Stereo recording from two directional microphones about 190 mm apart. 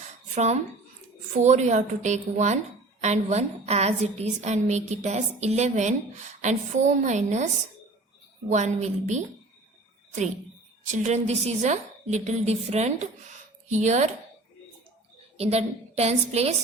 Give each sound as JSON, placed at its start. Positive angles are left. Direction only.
{"t": 0.3, "sound": "a woman's voice", "side_deg": -35}
{"t": 8.4, "sound": "a woman's voice", "side_deg": -40}
{"t": 10.9, "sound": "a woman's voice", "side_deg": -35}
{"t": 15.4, "sound": "a woman's voice", "side_deg": -35}